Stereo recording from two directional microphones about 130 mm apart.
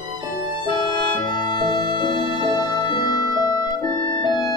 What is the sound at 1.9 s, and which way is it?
Music, 35° left (ahead or behind).